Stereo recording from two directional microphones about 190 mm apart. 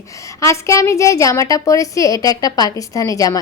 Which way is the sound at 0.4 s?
15° left (ahead or behind).